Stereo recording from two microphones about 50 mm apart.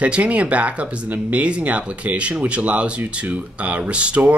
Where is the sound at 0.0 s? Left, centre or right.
Right.